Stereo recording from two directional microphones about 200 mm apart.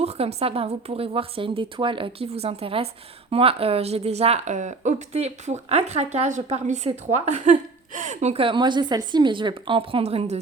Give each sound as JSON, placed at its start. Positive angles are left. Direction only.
{"t": 0.0, "sound": "a woman's voice", "side_deg": -30}